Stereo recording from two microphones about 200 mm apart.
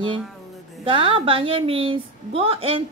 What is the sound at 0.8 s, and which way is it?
A woman's voice, 25° right (ahead or behind).